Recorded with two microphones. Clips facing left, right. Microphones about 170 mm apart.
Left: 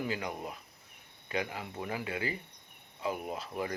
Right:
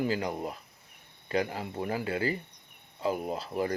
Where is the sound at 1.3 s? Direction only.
40° right (ahead or behind).